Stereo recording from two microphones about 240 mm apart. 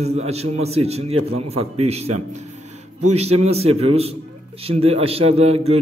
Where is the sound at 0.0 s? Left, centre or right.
Right.